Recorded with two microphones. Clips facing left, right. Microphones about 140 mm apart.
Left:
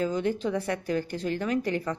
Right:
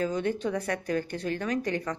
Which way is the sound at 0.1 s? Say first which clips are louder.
Left 1 dB; 5° left (ahead or behind).